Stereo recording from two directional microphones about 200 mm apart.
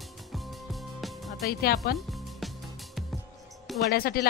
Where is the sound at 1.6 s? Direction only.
50° left (ahead or behind).